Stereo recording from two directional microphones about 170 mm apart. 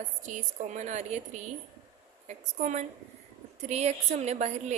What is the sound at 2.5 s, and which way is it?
A woman's voice, 45° right (ahead or behind).